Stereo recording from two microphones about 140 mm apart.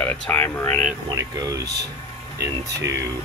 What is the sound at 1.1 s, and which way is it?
Speech, 25° right (ahead or behind).